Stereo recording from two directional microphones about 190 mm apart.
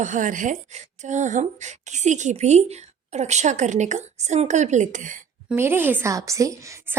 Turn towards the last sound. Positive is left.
turn(degrees=-15)  # may be behind; listen again after turning